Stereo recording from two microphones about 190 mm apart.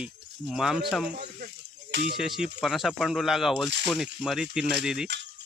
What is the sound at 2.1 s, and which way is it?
Speech, centre (ahead or behind).